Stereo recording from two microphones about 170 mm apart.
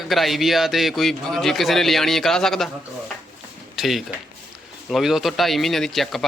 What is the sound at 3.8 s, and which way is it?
Speech, centre (ahead or behind).